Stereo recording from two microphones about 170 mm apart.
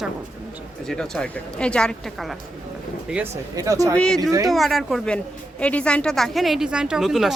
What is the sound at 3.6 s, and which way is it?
Speech, 20° right (ahead or behind).